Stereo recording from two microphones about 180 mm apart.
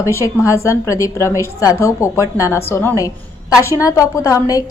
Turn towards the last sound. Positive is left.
turn(degrees=20)  # may be behind; listen again after turning